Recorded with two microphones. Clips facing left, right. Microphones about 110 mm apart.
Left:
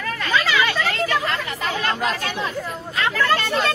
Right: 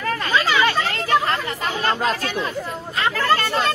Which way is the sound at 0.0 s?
35° right (ahead or behind).